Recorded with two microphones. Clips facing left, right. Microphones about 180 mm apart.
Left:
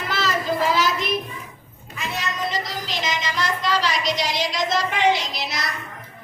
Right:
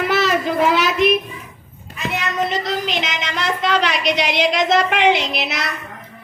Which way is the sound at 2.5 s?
60° right (ahead or behind).